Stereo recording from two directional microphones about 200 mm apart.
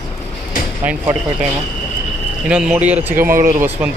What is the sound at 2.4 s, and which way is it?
Speech, 5° right (ahead or behind).